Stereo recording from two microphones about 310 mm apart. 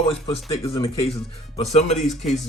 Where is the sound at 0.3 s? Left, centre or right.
Centre.